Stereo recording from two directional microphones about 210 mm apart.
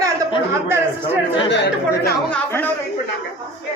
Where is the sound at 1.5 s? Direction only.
55° left (ahead or behind).